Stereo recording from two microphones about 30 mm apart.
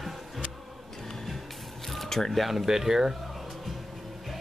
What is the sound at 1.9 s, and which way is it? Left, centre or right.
Single-lens reflex camera, centre.